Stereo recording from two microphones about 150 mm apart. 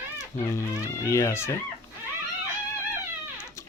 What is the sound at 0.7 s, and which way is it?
Speech, 20° left (ahead or behind).